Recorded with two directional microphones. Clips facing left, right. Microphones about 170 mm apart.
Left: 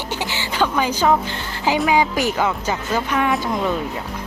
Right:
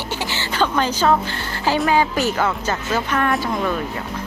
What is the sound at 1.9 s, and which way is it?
Speech, 15° left (ahead or behind).